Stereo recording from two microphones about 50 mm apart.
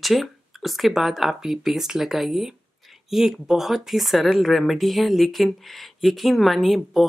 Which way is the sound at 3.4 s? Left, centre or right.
Centre.